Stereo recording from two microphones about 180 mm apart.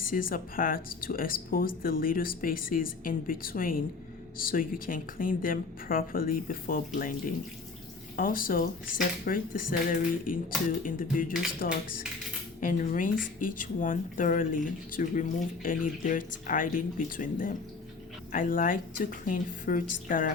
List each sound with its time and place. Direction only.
0.1 s speech: 50° left (ahead or behind)